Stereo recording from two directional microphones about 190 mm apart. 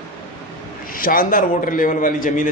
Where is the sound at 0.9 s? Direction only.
50° left (ahead or behind).